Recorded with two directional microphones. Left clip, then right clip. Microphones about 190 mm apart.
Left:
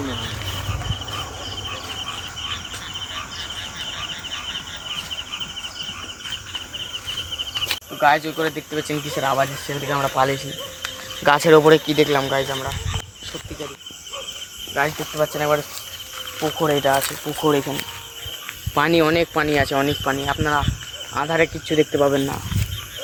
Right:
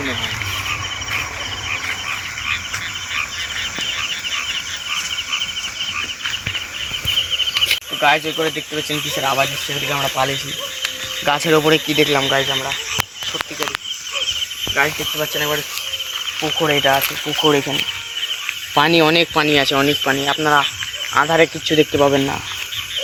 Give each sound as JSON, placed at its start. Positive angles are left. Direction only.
{"t": 7.7, "sound": "speech", "side_deg": -10}
{"t": 9.2, "sound": "speech", "side_deg": 10}
{"t": 11.3, "sound": "speech", "side_deg": 30}
{"t": 12.2, "sound": "speech", "side_deg": -35}
{"t": 15.2, "sound": "speech", "side_deg": 30}
{"t": 16.6, "sound": "speech", "side_deg": -20}
{"t": 18.7, "sound": "speech", "side_deg": -45}
{"t": 21.7, "sound": "speech", "side_deg": -50}